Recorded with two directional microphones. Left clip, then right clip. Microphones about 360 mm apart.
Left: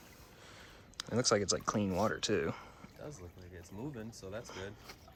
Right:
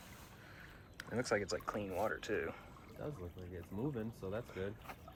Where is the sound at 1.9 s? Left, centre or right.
Left.